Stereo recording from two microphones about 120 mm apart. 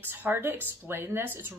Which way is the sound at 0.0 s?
15° right (ahead or behind).